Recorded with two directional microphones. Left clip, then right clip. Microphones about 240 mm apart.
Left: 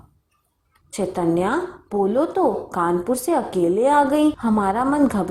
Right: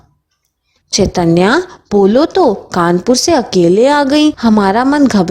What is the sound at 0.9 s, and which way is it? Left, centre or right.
Speech, right.